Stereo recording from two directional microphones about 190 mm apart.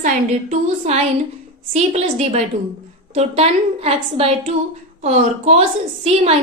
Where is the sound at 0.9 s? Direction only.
35° right (ahead or behind).